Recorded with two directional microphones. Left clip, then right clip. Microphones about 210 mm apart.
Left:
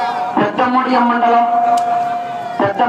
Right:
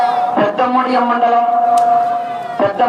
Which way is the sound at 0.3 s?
50° right (ahead or behind).